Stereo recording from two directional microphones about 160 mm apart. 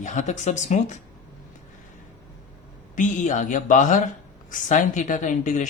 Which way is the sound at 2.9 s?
50° left (ahead or behind).